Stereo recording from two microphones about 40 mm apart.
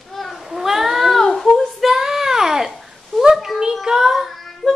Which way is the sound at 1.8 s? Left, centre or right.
Centre.